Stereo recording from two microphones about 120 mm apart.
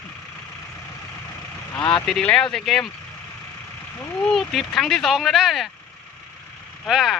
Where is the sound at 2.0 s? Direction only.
5° left (ahead or behind).